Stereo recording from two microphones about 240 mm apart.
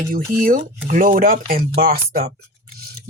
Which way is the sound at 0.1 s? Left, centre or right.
Right.